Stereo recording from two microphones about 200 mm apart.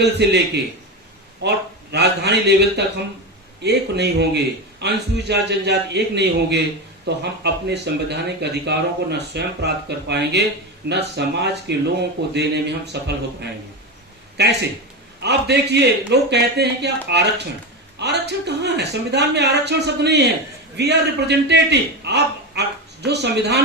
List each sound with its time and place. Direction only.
0.0 s a man's voice: 60° right (ahead or behind)
14.4 s a man's voice: 55° right (ahead or behind)